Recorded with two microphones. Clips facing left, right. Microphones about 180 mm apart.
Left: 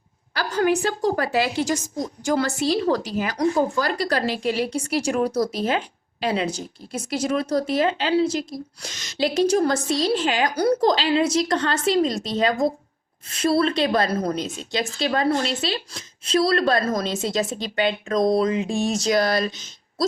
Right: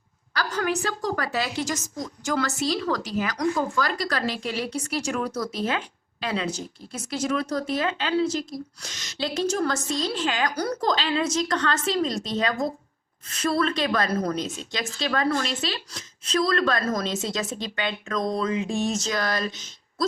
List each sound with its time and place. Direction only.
0.3 s a woman's voice: 30° left (ahead or behind)
9.1 s a woman's voice: 15° left (ahead or behind)
9.6 s a woman's voice: 35° left (ahead or behind)